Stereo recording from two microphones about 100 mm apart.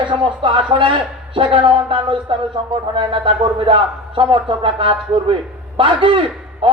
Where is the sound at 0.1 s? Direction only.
60° right (ahead or behind).